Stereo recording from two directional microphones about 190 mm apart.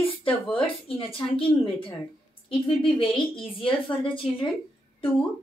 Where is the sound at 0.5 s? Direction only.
30° left (ahead or behind).